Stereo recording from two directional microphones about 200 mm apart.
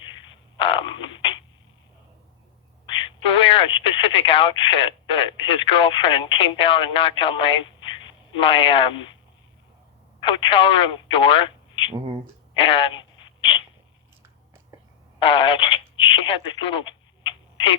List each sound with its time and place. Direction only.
0.6 s frog: 25° left (ahead or behind)
2.8 s speech: 25° left (ahead or behind)
10.2 s speech: 25° left (ahead or behind)
15.2 s telephone: 25° left (ahead or behind)